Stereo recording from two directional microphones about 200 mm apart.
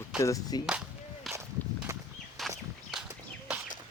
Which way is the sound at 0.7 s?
5° right (ahead or behind).